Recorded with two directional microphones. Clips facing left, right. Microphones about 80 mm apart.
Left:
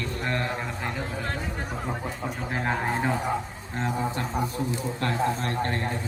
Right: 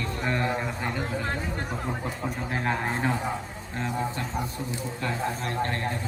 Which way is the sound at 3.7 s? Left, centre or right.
Left.